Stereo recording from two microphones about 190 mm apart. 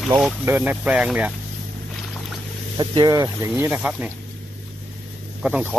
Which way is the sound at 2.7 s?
25° right (ahead or behind).